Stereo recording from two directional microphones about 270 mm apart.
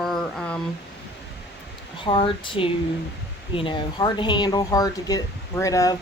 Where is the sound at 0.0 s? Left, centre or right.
Centre.